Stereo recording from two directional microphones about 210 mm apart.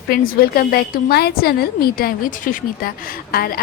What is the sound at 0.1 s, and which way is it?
A woman's voice, 45° left (ahead or behind).